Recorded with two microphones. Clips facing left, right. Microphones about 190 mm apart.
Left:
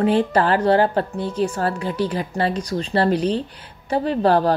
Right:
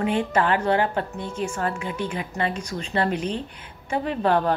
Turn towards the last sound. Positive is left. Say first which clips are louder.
# left 4 dB
turn(degrees=35)  # may be behind; listen again after turning